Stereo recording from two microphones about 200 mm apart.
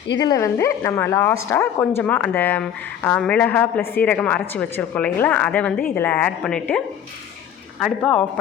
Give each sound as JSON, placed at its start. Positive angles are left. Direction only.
{"t": 0.2, "sound": "a woman's voice", "side_deg": 15}